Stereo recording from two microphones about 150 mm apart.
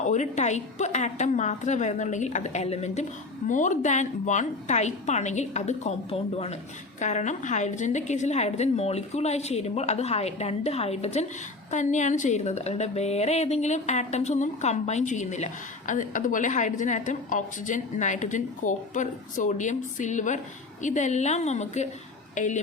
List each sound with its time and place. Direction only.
0.0 s a woman's voice: 50° left (ahead or behind)